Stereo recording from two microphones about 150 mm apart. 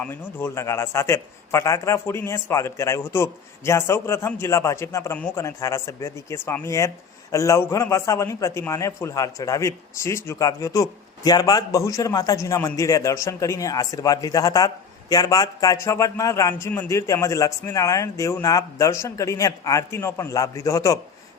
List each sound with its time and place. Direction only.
0.0 s a man's voice: 10° left (ahead or behind)
5.1 s a man's voice: 10° left (ahead or behind)
5.4 s speech: 20° left (ahead or behind)